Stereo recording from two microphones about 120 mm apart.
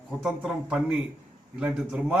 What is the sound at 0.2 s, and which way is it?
A man's voice, 5° right (ahead or behind).